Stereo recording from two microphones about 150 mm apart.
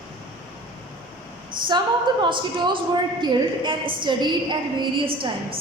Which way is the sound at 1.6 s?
30° right (ahead or behind).